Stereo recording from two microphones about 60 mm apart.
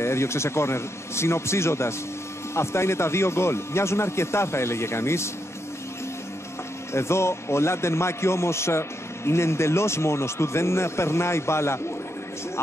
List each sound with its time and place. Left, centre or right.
0.0 s a man's voice: left
6.9 s a man's voice: left